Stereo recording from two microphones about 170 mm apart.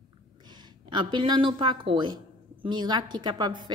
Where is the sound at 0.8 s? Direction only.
30° right (ahead or behind).